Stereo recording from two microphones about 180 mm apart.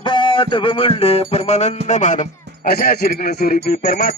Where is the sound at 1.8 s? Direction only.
40° left (ahead or behind).